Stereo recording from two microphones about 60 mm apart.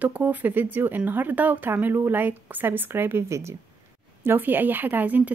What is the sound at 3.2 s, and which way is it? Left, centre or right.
Speech, right.